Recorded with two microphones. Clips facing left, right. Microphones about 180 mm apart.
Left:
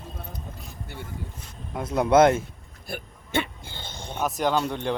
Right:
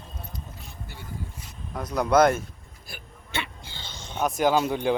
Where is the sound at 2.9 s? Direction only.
50° left (ahead or behind).